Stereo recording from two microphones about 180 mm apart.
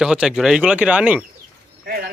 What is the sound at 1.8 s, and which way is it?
Speech, 55° right (ahead or behind).